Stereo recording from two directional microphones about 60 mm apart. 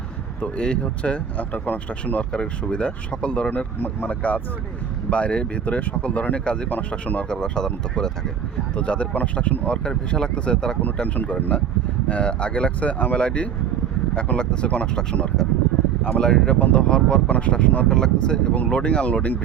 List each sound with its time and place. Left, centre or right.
0.4 s speech: centre
2.3 s speech: centre
3.8 s speech: left
6.7 s speech: left
7.3 s speech: centre
11.3 s speech: left
17.8 s speech: centre
18.5 s speech: left